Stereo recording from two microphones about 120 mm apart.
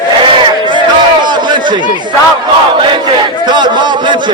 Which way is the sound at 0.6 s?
40° right (ahead or behind).